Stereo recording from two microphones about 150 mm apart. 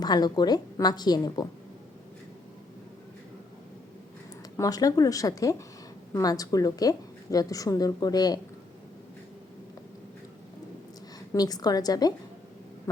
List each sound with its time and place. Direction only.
0.0 s a woman's voice: 25° left (ahead or behind)
4.5 s a woman's voice: 25° left (ahead or behind)
11.3 s a woman's voice: 25° left (ahead or behind)